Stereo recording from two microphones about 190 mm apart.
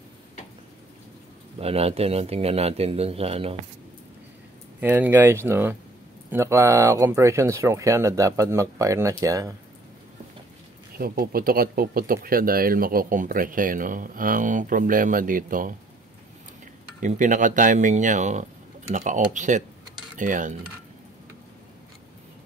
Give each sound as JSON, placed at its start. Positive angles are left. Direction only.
{"t": 1.6, "sound": "speech", "side_deg": -30}
{"t": 4.7, "sound": "speech", "side_deg": -10}
{"t": 11.0, "sound": "speech", "side_deg": -50}
{"t": 17.0, "sound": "speech", "side_deg": -40}